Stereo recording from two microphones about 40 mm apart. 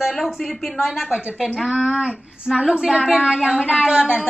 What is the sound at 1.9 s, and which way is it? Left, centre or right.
A woman's voice, right.